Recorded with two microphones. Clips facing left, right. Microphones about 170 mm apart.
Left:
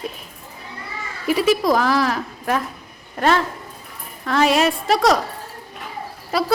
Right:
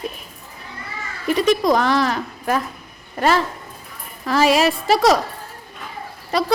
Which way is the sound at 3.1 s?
Centre (ahead or behind).